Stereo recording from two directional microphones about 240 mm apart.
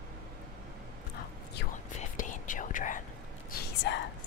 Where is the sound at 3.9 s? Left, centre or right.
Left.